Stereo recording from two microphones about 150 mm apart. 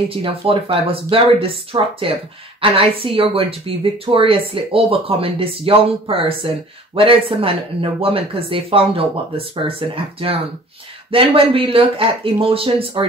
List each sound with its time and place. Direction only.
0.1 s speech: 35° right (ahead or behind)